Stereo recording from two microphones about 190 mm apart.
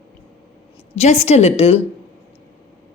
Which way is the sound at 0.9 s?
35° left (ahead or behind).